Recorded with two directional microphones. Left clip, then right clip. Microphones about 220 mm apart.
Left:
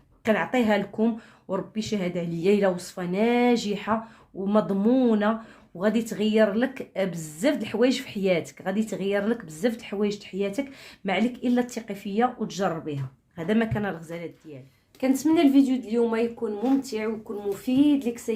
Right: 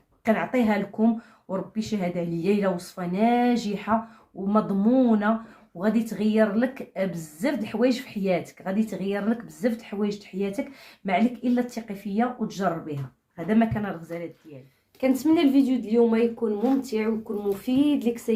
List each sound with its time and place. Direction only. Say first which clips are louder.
0.3 s a woman's voice: left 1 dB; 40° left (ahead or behind)
15.0 s speech: even; 5° left (ahead or behind)